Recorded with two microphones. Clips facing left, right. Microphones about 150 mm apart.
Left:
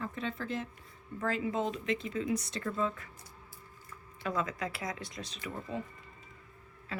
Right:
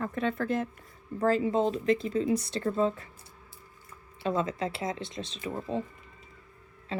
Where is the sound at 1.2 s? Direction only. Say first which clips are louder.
Right 7 dB; 35° right (ahead or behind).